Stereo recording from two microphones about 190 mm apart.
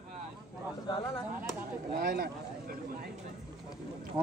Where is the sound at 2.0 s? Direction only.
55° right (ahead or behind).